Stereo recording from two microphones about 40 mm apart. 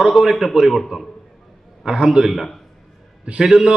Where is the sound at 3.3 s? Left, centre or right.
Centre.